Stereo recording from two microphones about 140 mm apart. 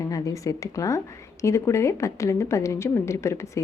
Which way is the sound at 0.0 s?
25° left (ahead or behind).